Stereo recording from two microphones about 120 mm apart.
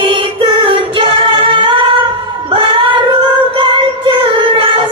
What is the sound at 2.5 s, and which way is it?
Music, 45° right (ahead or behind).